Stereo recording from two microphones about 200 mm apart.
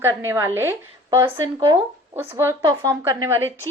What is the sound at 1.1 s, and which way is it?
Speech, 25° right (ahead or behind).